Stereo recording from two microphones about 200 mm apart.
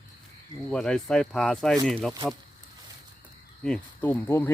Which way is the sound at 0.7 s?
5° left (ahead or behind).